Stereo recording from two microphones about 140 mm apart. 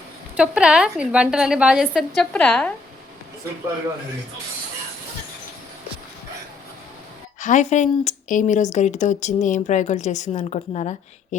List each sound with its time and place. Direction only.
0.3 s speech: 5° right (ahead or behind)
7.3 s speech: 65° left (ahead or behind)